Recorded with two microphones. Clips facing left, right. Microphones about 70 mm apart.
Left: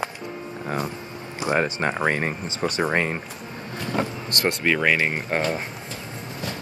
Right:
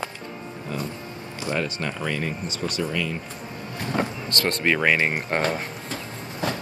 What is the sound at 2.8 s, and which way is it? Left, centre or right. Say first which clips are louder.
Speech: left 7 dB; left.